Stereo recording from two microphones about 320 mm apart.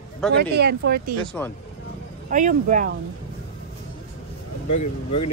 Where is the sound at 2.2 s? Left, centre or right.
Right.